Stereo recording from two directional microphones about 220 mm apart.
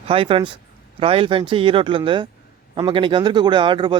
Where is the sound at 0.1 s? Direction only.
25° right (ahead or behind).